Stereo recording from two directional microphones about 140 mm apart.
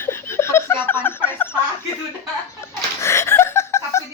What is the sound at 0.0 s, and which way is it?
Laughter, 15° left (ahead or behind).